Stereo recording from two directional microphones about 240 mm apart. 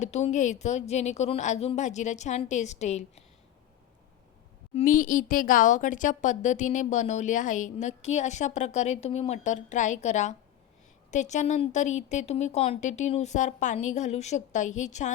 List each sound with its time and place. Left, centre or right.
0.0 s a woman's voice: left
4.7 s a woman's voice: left